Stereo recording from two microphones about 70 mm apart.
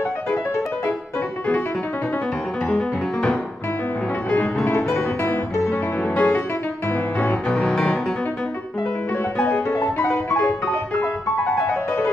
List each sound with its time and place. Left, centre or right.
2.7 s music: centre
6.1 s music: left
7.4 s music: centre
9.4 s music: left